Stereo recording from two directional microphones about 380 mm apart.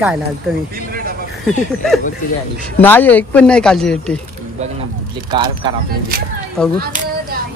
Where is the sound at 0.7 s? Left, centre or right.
Right.